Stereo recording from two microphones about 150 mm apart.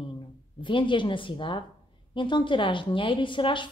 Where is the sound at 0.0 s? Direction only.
35° left (ahead or behind).